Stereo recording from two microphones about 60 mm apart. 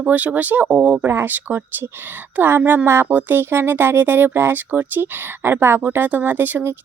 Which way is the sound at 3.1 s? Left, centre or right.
Right.